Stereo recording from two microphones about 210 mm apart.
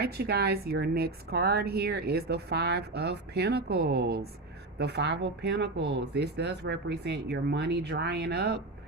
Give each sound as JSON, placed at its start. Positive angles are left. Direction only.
{"t": 0.0, "sound": "a woman's voice", "side_deg": -50}